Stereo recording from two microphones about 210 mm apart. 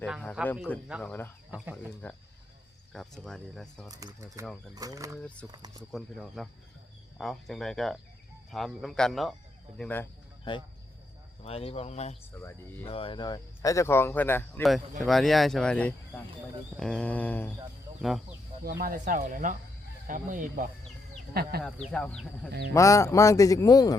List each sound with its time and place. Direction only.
0.0 s speech: 5° left (ahead or behind)
1.0 s speech: 10° left (ahead or behind)
1.5 s speech: 5° right (ahead or behind)
1.7 s speech: 5° left (ahead or behind)
3.8 s speech: 15° right (ahead or behind)
5.9 s speech: centre (ahead or behind)
11.4 s speech: 30° left (ahead or behind)
12.4 s speech: 10° left (ahead or behind)
12.8 s speech: 25° left (ahead or behind); by 17.5 s 10° left (ahead or behind)
18.6 s speech: 45° right (ahead or behind)
21.6 s speech: 5° left (ahead or behind)
22.7 s speech: 15° left (ahead or behind)